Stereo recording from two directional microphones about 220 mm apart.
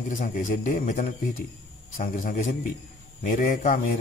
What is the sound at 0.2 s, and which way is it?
A man's voice, 35° left (ahead or behind).